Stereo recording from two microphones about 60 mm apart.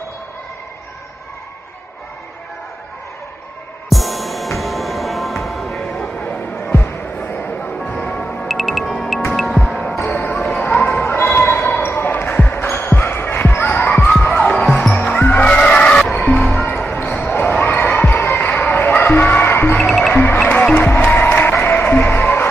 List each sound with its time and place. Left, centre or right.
3.9 s music: centre
6.1 s music: left
6.6 s music: left
8.4 s music: centre
10.0 s basketball bounce: left
14.0 s a sound: centre
14.3 s basketball bounce: left
15.1 s music: left
15.4 s music: centre
16.9 s basketball bounce: left
17.9 s music: left
20.8 s music: left